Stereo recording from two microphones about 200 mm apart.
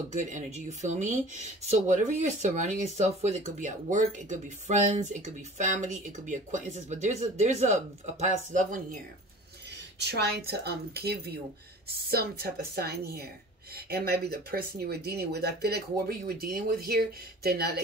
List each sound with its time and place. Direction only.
0.1 s speech: 40° right (ahead or behind)
9.9 s speech: 55° right (ahead or behind)